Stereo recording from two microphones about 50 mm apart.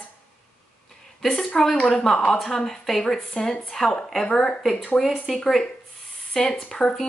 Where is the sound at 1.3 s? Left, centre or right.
Centre.